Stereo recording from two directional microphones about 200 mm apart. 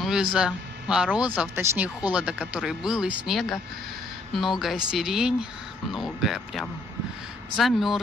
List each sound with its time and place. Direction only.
0.0 s speech: 5° right (ahead or behind)